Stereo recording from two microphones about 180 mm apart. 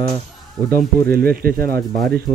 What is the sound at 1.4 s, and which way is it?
Speech, 55° right (ahead or behind).